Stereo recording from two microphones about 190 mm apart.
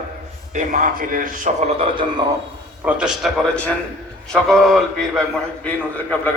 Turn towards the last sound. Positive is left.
turn(degrees=10)  # may be behind; listen again after turning